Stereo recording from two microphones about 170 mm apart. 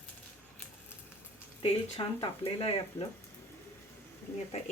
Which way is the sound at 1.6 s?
35° left (ahead or behind).